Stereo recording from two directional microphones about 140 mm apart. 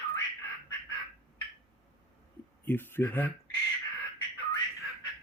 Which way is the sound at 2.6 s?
15° left (ahead or behind).